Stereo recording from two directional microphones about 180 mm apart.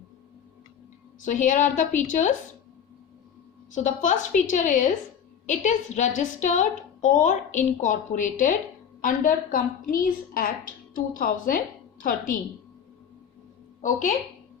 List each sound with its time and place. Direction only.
1.2 s a woman's voice: 45° left (ahead or behind)
3.7 s a woman's voice: 45° left (ahead or behind)